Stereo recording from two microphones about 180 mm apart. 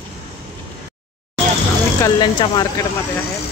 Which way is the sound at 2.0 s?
25° left (ahead or behind).